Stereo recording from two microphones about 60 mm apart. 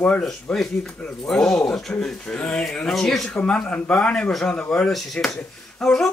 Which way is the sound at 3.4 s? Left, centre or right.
Centre.